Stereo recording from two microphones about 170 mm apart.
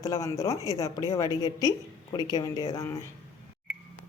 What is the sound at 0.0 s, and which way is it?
Speech, 20° left (ahead or behind).